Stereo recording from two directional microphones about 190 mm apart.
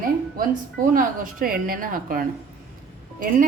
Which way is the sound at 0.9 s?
50° right (ahead or behind).